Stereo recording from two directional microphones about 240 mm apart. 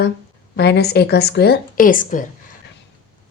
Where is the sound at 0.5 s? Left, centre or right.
Left.